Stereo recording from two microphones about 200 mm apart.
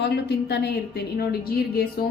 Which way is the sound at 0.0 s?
55° left (ahead or behind).